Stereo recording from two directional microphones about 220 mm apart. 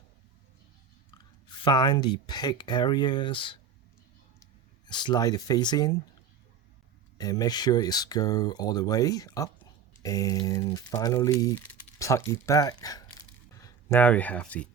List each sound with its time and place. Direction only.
1.6 s speech: 20° left (ahead or behind)
4.9 s speech: 20° left (ahead or behind)
7.2 s speech: 15° left (ahead or behind)